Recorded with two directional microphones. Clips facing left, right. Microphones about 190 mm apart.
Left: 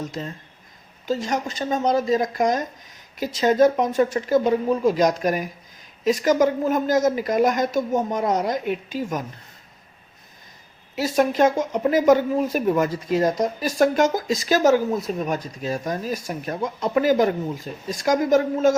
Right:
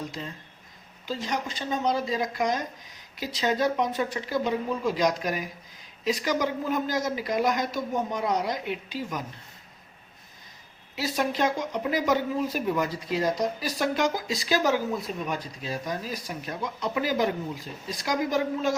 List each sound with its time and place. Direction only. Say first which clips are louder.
1.0 s speech: left 6 dB; 45° left (ahead or behind)
10.9 s speech: left 8 dB; 50° left (ahead or behind)